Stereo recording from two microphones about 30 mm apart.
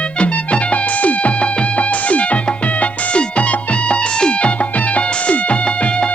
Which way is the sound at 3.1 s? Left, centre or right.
Left.